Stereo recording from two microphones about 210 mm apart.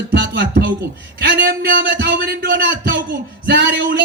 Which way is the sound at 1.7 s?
60° right (ahead or behind).